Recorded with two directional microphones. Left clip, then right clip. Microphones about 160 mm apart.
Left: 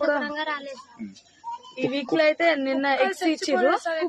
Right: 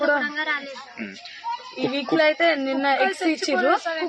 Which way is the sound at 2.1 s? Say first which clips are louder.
Right 1 dB; 30° left (ahead or behind).